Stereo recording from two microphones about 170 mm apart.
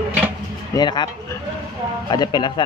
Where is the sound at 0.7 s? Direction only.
25° left (ahead or behind).